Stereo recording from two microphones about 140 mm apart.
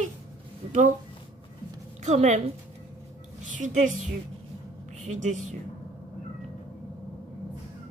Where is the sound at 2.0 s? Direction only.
55° right (ahead or behind).